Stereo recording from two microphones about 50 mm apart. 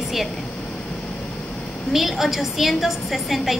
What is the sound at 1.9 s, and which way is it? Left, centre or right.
A woman's voice, centre.